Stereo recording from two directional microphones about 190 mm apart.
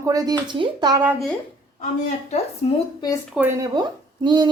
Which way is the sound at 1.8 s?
40° left (ahead or behind).